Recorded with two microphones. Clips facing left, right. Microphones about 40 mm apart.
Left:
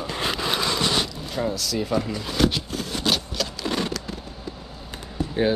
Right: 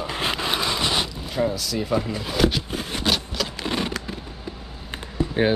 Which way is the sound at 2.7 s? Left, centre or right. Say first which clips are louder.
Right 1 dB; right.